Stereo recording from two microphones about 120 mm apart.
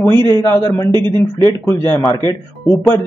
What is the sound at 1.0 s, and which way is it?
Speech, 40° right (ahead or behind).